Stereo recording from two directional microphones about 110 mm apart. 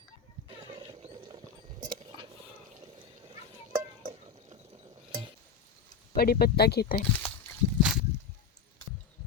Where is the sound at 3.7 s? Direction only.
35° right (ahead or behind).